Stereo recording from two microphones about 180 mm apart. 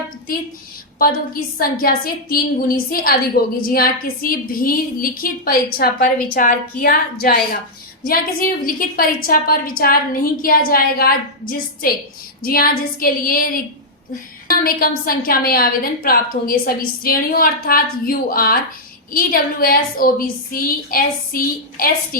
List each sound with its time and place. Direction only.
0.9 s a woman's voice: 55° left (ahead or behind)
14.6 s a woman's voice: 55° left (ahead or behind)